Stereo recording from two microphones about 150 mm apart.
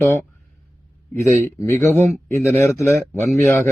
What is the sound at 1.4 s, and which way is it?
Speech, 15° left (ahead or behind).